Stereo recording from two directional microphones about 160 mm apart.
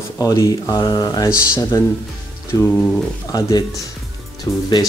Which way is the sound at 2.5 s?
10° left (ahead or behind).